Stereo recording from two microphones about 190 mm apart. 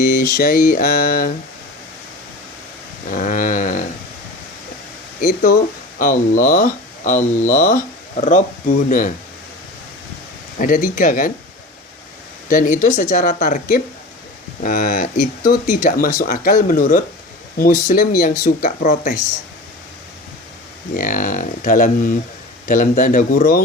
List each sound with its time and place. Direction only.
0.0 s mantra: 45° left (ahead or behind)
0.3 s speech: 50° left (ahead or behind)
3.1 s a sound: 45° left (ahead or behind)
5.2 s speech: 45° left (ahead or behind)
10.6 s speech: 45° left (ahead or behind)
12.5 s speech: 45° left (ahead or behind)
20.9 s speech: 45° left (ahead or behind)